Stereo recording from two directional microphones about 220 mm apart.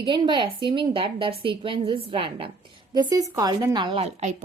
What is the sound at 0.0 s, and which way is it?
A woman's voice, 20° right (ahead or behind).